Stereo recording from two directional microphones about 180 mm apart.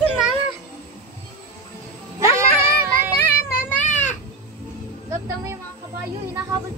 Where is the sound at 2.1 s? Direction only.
15° right (ahead or behind).